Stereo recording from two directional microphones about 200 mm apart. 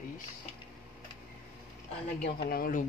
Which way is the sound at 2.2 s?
50° left (ahead or behind).